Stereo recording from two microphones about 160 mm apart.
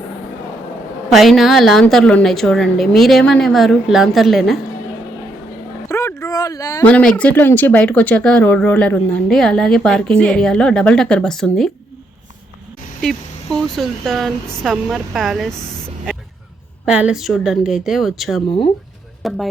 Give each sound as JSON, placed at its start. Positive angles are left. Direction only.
{"t": 1.1, "sound": "speech", "side_deg": 0}
{"t": 5.9, "sound": "a sound", "side_deg": 20}
{"t": 6.8, "sound": "speech", "side_deg": 10}
{"t": 13.0, "sound": "speech", "side_deg": 5}
{"t": 16.8, "sound": "speech", "side_deg": -5}